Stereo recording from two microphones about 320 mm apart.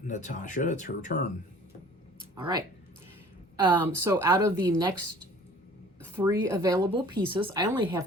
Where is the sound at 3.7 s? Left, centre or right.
Centre.